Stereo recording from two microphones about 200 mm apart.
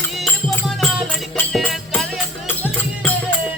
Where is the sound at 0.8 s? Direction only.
Centre (ahead or behind).